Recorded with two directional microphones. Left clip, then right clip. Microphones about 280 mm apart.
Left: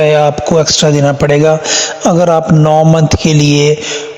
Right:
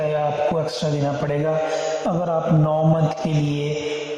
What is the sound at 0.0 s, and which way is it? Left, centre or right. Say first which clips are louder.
A man's voice: left 12 dB; left.